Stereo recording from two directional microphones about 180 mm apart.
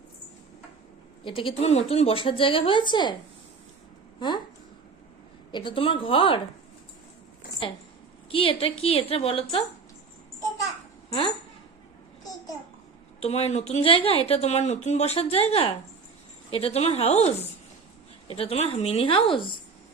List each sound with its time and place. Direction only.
1.2 s a woman's voice: 30° left (ahead or behind)
5.5 s a woman's voice: 25° left (ahead or behind)
8.3 s speech: 30° left (ahead or behind)
13.2 s speech: 35° left (ahead or behind)